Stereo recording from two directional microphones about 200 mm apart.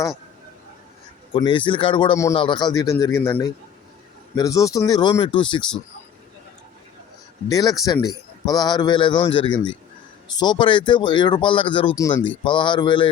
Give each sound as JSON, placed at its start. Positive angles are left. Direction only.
{"t": 1.3, "sound": "a man's voice", "side_deg": 25}
{"t": 4.4, "sound": "speech", "side_deg": 15}
{"t": 7.4, "sound": "speech", "side_deg": 20}